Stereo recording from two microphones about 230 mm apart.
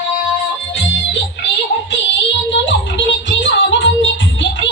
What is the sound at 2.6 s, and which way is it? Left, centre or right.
Music, left.